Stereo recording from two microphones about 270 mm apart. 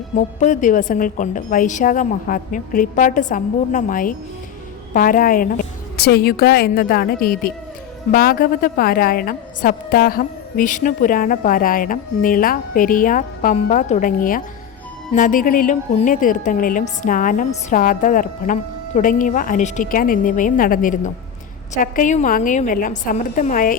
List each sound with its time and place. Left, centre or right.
0.2 s a woman's voice: left